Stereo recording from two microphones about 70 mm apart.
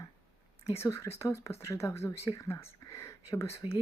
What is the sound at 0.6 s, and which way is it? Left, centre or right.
Speech, left.